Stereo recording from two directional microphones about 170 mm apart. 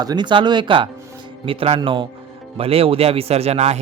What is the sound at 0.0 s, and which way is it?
Speech, 25° right (ahead or behind).